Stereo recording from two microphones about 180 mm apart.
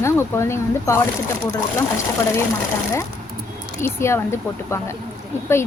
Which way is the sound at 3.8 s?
15° left (ahead or behind).